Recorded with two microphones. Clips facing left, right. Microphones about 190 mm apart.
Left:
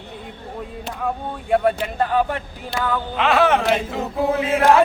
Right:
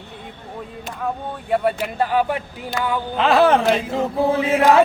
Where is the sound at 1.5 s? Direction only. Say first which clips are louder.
Left 2 dB; centre (ahead or behind).